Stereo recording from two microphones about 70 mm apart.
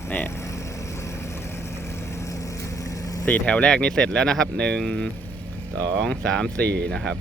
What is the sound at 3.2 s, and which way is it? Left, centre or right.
Speech, left.